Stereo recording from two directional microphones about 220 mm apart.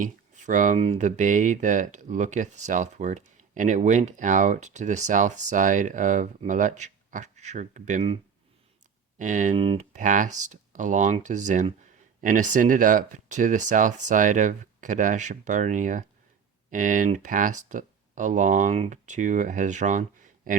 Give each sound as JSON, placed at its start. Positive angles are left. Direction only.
{"t": 0.0, "sound": "speech", "side_deg": -35}